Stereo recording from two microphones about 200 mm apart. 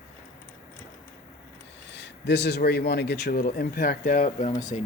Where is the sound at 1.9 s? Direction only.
60° left (ahead or behind); by 4.5 s 45° left (ahead or behind).